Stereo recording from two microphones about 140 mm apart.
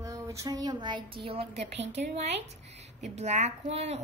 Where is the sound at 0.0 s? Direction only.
25° right (ahead or behind).